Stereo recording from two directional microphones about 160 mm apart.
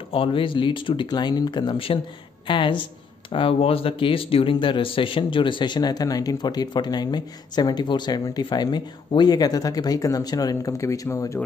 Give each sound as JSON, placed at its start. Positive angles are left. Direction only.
{"t": 0.1, "sound": "speech", "side_deg": 35}